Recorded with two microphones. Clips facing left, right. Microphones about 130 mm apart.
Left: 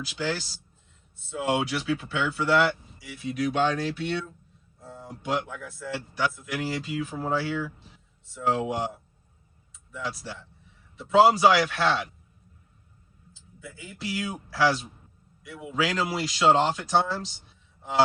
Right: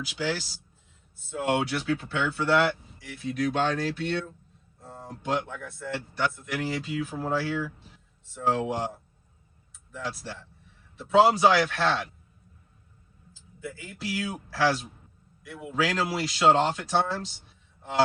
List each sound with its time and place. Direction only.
0.0 s speech: 5° right (ahead or behind)
10.0 s speech: centre (ahead or behind)
13.7 s speech: centre (ahead or behind)